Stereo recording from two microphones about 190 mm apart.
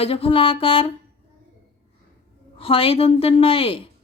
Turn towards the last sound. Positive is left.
turn(degrees=30)  # may be behind; listen again after turning